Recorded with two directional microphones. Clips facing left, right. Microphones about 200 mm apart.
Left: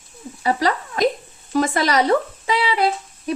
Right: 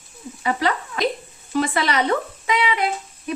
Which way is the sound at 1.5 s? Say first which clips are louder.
Left 3 dB; 40° left (ahead or behind).